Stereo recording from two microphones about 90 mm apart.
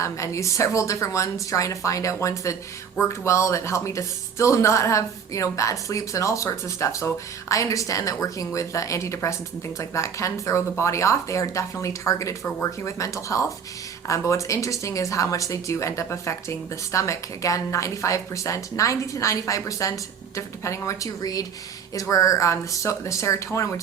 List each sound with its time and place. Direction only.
0.0 s a woman's voice: 35° left (ahead or behind)